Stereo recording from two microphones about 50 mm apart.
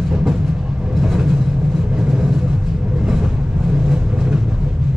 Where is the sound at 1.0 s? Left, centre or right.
Centre.